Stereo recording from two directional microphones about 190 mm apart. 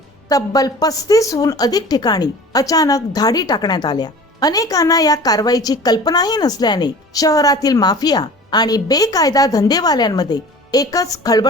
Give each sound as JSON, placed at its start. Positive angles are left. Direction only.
{"t": 0.3, "sound": "a woman's voice", "side_deg": 20}